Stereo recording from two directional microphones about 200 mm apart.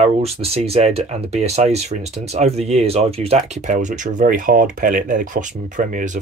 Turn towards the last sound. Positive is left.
turn(degrees=-40)  # may be behind; listen again after turning